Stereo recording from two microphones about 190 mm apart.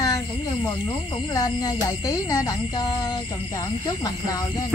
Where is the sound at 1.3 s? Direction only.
20° left (ahead or behind).